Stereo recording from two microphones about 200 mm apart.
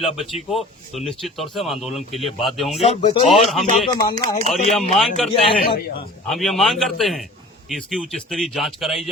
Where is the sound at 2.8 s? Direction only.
25° left (ahead or behind).